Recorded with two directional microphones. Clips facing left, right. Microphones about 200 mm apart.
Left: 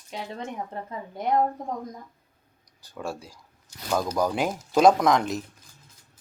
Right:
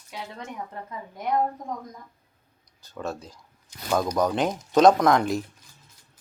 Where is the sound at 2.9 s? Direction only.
10° left (ahead or behind).